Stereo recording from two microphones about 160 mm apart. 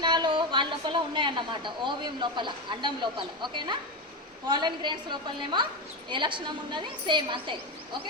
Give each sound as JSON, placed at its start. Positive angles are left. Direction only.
{"t": 0.0, "sound": "a woman's voice", "side_deg": -30}